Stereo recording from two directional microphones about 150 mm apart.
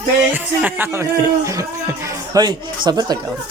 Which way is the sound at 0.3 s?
15° right (ahead or behind).